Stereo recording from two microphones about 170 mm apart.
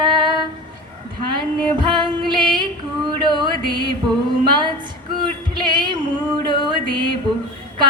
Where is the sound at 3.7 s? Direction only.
25° right (ahead or behind).